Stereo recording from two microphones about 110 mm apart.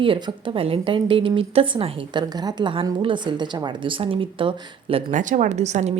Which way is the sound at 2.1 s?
40° right (ahead or behind).